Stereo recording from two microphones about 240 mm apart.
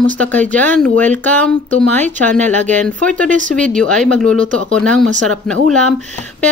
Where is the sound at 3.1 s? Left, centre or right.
Right.